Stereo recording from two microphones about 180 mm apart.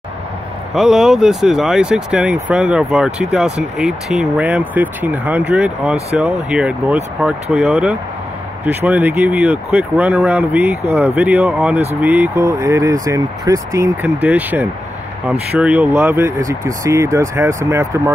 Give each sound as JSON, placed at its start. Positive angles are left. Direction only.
{"t": 0.7, "sound": "speech", "side_deg": -5}